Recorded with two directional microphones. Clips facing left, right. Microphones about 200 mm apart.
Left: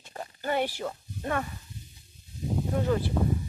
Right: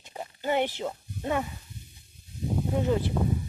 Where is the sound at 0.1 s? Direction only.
15° right (ahead or behind).